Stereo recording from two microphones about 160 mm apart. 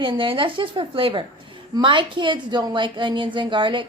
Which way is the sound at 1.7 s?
30° right (ahead or behind).